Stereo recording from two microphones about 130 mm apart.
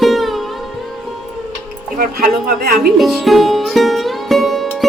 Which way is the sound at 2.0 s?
90° right.